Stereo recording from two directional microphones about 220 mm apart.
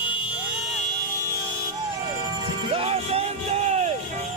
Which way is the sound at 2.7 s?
25° right (ahead or behind).